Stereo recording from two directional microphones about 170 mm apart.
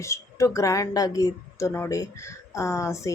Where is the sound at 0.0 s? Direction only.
15° left (ahead or behind).